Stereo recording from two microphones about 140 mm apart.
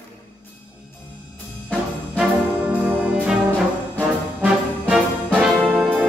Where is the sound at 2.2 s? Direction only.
5° right (ahead or behind).